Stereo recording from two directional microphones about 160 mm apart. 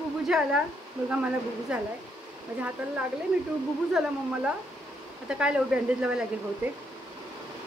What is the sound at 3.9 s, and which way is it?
A woman's voice, 5° right (ahead or behind).